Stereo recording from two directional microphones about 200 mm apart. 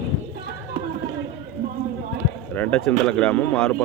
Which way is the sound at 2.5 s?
5° left (ahead or behind).